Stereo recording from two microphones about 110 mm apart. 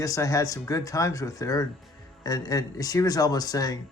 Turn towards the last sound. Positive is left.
turn(degrees=35)  # may be behind; listen again after turning